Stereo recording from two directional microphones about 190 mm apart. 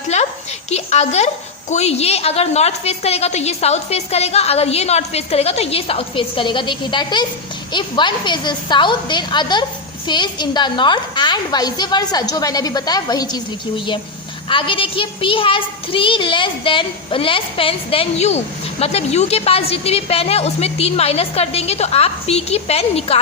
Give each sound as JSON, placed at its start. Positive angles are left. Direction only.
{"t": 0.1, "sound": "a sound", "side_deg": 35}
{"t": 0.7, "sound": "a woman's voice", "side_deg": 35}
{"t": 14.5, "sound": "a child's voice", "side_deg": 25}